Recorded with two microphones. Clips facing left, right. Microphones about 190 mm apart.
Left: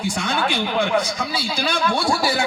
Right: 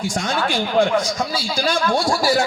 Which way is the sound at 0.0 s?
60° left (ahead or behind).